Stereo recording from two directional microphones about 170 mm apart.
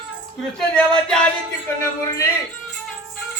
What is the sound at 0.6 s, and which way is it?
Music, 5° left (ahead or behind).